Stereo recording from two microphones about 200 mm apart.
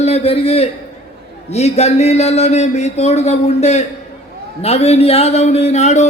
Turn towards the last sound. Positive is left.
turn(degrees=35)  # may be behind; listen again after turning